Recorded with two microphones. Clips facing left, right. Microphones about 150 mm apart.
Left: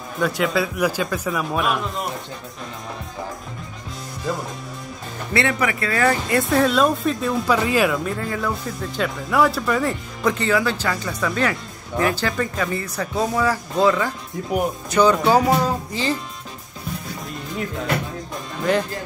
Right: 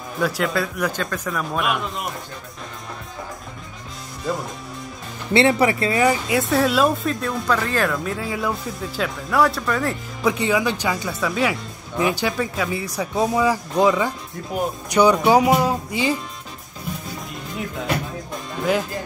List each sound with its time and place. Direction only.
0.2 s speech: centre (ahead or behind)
5.3 s speech: 25° right (ahead or behind)
6.2 s speech: centre (ahead or behind)
18.7 s speech: 5° right (ahead or behind)